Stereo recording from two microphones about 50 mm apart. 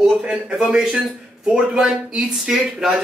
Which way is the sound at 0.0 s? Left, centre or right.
Centre.